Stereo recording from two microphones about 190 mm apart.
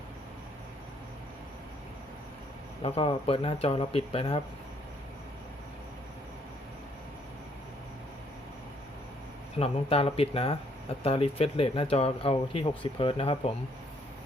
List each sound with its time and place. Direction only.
2.8 s speech: 30° left (ahead or behind)
9.6 s speech: 30° left (ahead or behind)